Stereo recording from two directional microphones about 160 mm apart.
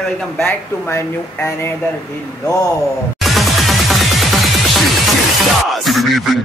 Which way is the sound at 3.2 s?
Centre (ahead or behind).